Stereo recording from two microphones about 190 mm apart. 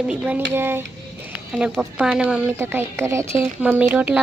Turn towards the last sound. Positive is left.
turn(degrees=-10)  # may be behind; listen again after turning